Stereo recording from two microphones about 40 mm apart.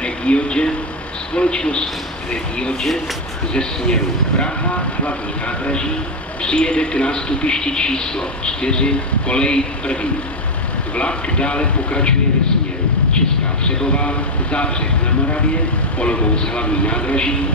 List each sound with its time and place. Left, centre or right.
0.0 s a man's voice: left
3.5 s a man's voice: left
6.4 s a man's voice: left
11.0 s a man's voice: left
13.7 s a man's voice: left
16.0 s a man's voice: left